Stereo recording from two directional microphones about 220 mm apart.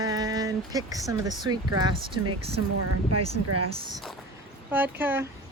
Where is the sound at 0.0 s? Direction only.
15° right (ahead or behind).